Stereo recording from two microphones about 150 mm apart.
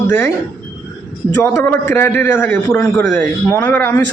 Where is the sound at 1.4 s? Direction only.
15° left (ahead or behind).